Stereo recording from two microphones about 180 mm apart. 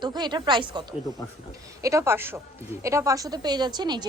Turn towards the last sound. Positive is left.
turn(degrees=-25)  # may be behind; listen again after turning